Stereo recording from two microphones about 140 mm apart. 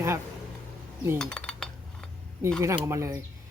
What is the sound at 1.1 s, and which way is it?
Chink, 5° left (ahead or behind).